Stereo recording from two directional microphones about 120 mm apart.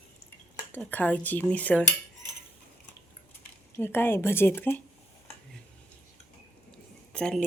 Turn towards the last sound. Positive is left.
turn(degrees=5)  # may be behind; listen again after turning